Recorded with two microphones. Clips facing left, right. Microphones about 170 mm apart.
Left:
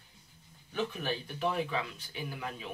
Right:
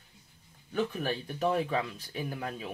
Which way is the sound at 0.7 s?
45° right (ahead or behind).